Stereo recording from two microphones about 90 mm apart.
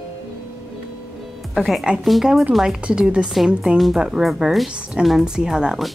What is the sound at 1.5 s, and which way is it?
A woman's voice, centre (ahead or behind).